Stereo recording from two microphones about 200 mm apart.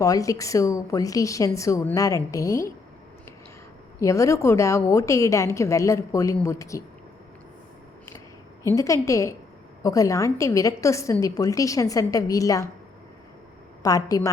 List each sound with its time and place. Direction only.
0.0 s a woman's voice: 15° left (ahead or behind)
4.0 s a woman's voice: 15° left (ahead or behind)
8.7 s a woman's voice: 15° left (ahead or behind)
13.8 s a woman's voice: 15° left (ahead or behind)